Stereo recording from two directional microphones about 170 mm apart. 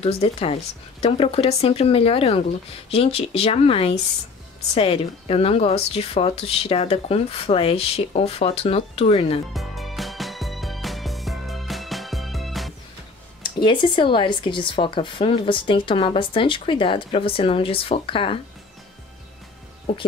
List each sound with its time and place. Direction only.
0.0 s speech: 35° left (ahead or behind)
9.5 s music: centre (ahead or behind)
13.4 s speech: 30° left (ahead or behind)